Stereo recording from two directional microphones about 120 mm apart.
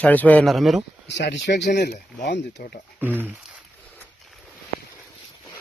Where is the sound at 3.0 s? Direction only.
15° right (ahead or behind).